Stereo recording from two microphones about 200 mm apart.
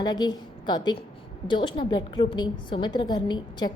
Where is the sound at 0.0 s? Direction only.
20° left (ahead or behind).